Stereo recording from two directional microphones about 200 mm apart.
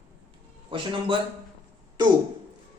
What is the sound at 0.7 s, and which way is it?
Speech, 25° right (ahead or behind).